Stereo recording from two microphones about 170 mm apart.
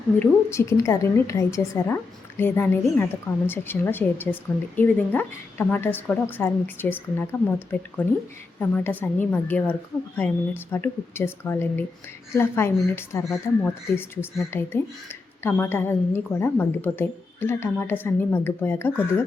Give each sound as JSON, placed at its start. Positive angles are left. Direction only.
{"t": 0.2, "sound": "a woman's voice", "side_deg": 15}